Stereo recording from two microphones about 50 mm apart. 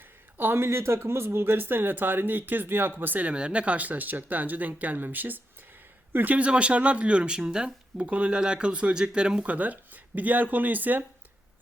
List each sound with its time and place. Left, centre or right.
0.3 s speech: right
3.3 s speech: right
6.4 s speech: right
8.0 s speech: right
9.5 s speech: right